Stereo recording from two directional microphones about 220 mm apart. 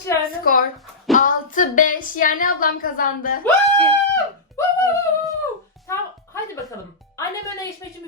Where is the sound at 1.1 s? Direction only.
35° left (ahead or behind).